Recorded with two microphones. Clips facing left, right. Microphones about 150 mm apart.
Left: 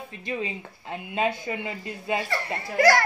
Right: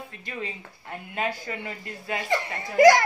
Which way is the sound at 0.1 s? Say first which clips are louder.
Left 8 dB; 20° left (ahead or behind).